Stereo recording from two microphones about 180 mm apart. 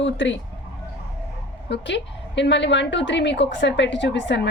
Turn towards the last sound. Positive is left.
turn(degrees=75)  # may be behind; listen again after turning